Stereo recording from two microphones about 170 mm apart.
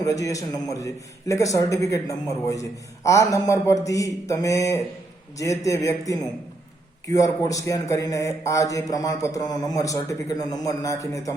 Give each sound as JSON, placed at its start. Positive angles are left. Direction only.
{"t": 0.0, "sound": "a man's voice", "side_deg": 20}